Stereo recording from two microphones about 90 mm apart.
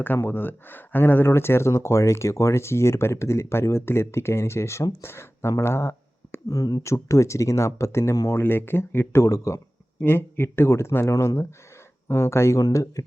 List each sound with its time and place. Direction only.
0.0 s speech: 20° left (ahead or behind)
8.4 s speech: 25° left (ahead or behind)
10.0 s speech: 25° left (ahead or behind); by 13.1 s 40° left (ahead or behind)